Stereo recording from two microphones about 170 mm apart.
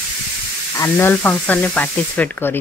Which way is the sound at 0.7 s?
10° left (ahead or behind).